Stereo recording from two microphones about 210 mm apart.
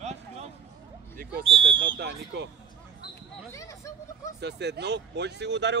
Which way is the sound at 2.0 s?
55° right (ahead or behind).